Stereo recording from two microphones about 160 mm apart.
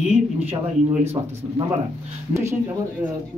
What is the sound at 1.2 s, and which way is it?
Speech, 25° right (ahead or behind).